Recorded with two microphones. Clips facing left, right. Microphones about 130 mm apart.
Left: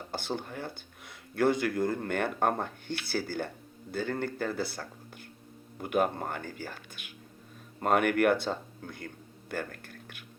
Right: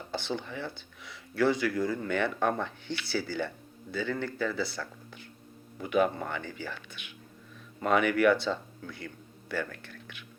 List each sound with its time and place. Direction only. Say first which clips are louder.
0.1 s speech: right 1 dB; 50° left (ahead or behind)